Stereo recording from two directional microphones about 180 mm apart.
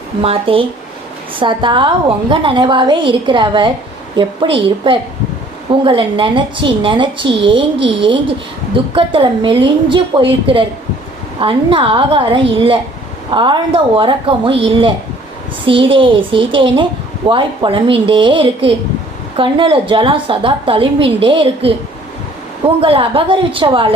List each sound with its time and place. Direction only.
0.2 s a woman's voice: 30° right (ahead or behind)